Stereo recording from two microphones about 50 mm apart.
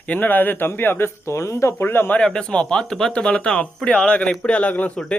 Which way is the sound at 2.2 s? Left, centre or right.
Centre.